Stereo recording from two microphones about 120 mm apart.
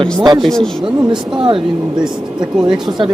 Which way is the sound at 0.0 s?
40° right (ahead or behind).